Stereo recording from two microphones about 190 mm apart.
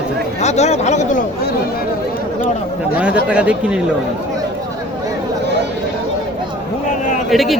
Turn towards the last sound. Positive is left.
turn(degrees=0)  # may be behind; listen again after turning